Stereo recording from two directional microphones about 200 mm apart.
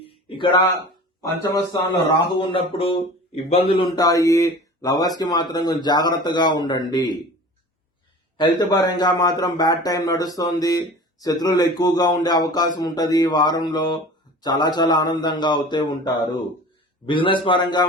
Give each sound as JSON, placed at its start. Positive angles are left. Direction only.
{"t": 0.0, "sound": "a sound", "side_deg": 25}
{"t": 1.2, "sound": "speech", "side_deg": 15}
{"t": 8.4, "sound": "speech", "side_deg": 20}